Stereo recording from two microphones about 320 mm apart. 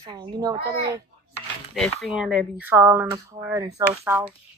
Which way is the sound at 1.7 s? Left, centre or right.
Centre.